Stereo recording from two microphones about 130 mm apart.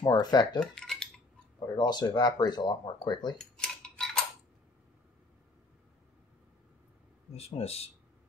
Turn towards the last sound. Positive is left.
turn(degrees=50)  # may be behind; listen again after turning